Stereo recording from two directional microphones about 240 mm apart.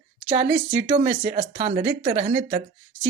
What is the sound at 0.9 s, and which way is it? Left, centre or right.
Speech, right.